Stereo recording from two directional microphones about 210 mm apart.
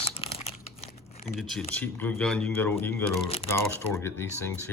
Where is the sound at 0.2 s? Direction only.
25° left (ahead or behind).